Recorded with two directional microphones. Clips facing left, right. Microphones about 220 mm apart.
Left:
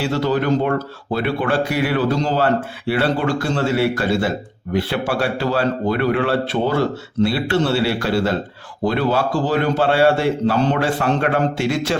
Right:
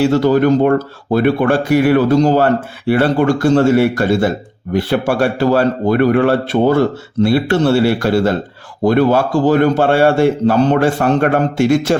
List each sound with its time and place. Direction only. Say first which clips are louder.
0.0 s speech: right 8 dB; 45° right (ahead or behind)